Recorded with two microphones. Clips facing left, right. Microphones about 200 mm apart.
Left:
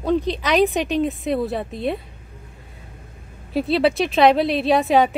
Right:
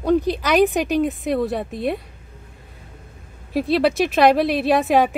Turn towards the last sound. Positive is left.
turn(degrees=0)  # may be behind; listen again after turning